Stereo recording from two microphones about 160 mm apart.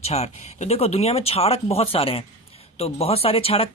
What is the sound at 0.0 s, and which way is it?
Speech, 40° left (ahead or behind).